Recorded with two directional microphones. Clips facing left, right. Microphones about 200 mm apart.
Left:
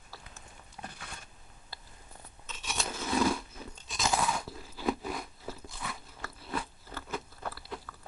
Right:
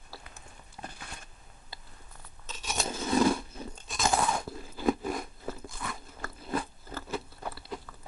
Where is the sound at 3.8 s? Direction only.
50° right (ahead or behind).